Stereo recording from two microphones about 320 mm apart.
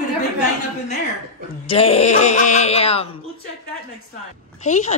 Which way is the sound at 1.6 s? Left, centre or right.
Centre.